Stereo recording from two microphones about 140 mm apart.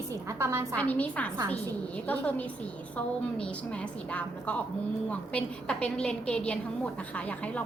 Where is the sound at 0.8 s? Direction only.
10° left (ahead or behind).